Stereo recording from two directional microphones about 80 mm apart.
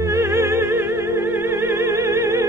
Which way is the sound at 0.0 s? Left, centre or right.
Right.